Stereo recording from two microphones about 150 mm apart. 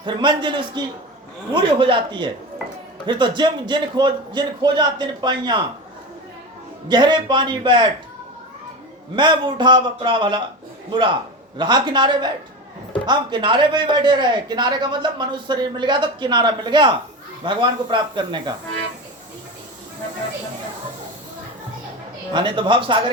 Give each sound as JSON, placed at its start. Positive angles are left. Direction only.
{"t": 0.0, "sound": "a man's voice", "side_deg": -30}
{"t": 6.8, "sound": "a man's voice", "side_deg": -30}
{"t": 9.1, "sound": "a man's voice", "side_deg": -30}
{"t": 22.3, "sound": "a man's voice", "side_deg": -30}